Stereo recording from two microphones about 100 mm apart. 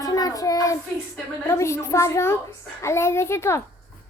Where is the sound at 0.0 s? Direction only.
35° left (ahead or behind).